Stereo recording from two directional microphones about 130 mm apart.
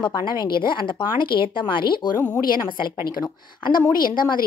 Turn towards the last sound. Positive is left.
turn(degrees=90)